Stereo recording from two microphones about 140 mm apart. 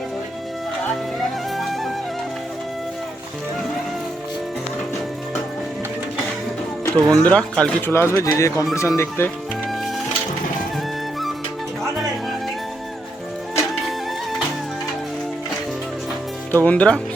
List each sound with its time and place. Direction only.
1.5 s music: centre (ahead or behind)
6.8 s speech: 10° left (ahead or behind)
16.5 s speech: 10° left (ahead or behind)